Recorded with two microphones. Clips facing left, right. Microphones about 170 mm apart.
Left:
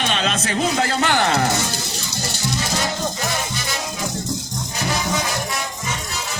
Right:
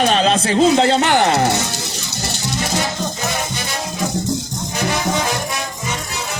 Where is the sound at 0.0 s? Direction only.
35° right (ahead or behind); by 1.4 s 20° right (ahead or behind).